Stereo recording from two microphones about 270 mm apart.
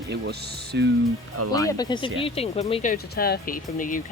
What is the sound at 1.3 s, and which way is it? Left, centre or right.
Speech, right.